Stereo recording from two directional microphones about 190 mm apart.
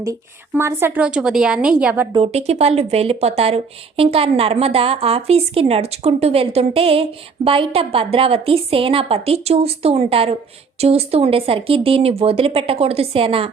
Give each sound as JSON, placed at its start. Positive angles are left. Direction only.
{"t": 0.0, "sound": "a woman's voice", "side_deg": -15}
{"t": 2.1, "sound": "speech", "side_deg": -30}